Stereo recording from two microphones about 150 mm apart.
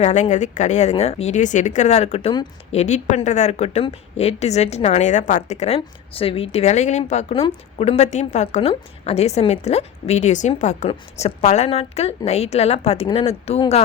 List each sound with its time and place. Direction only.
0.0 s a woman's voice: 50° left (ahead or behind)